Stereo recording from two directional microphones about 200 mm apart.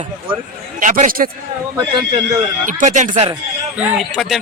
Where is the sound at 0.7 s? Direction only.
40° right (ahead or behind).